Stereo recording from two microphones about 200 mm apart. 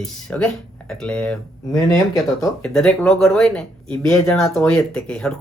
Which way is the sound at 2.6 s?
5° left (ahead or behind).